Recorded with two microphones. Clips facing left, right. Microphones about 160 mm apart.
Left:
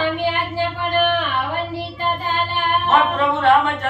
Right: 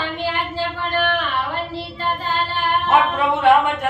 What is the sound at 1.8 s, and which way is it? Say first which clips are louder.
Child singing: left 1 dB; 20° left (ahead or behind).